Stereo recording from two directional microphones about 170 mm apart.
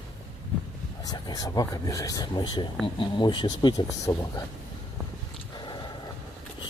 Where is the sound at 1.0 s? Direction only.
20° left (ahead or behind).